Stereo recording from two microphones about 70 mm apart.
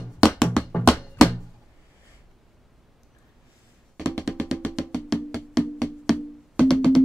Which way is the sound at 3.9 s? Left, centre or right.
Centre.